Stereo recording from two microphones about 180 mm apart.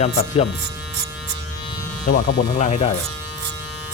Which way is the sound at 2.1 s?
50° left (ahead or behind).